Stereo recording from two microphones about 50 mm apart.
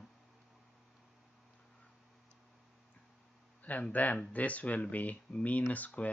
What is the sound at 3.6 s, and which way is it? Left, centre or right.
Speech, left.